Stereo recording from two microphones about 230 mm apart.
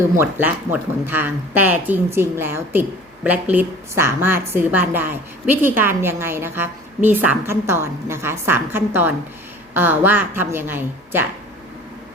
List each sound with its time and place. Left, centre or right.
0.2 s a woman's voice: centre